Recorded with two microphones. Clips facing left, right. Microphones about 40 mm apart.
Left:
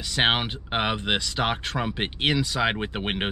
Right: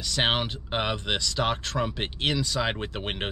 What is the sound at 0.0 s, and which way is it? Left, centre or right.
Speech, left.